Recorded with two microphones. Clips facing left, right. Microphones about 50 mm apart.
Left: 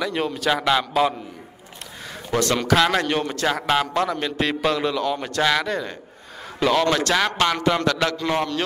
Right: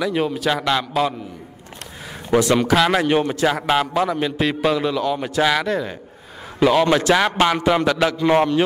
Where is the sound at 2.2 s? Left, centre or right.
Centre.